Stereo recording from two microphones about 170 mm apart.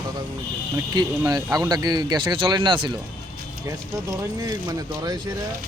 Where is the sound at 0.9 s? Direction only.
20° right (ahead or behind).